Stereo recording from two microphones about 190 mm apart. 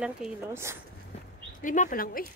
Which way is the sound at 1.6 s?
45° left (ahead or behind).